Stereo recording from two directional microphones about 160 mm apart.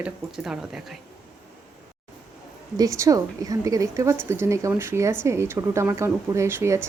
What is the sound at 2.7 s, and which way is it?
A woman's voice, 20° right (ahead or behind).